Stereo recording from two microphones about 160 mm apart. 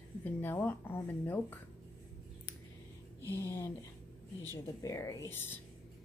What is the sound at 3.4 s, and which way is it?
Speech, 15° left (ahead or behind).